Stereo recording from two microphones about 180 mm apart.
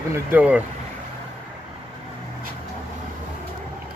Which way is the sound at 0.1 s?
10° right (ahead or behind).